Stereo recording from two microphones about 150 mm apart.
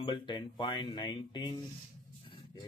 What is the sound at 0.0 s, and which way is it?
Speech, 30° left (ahead or behind).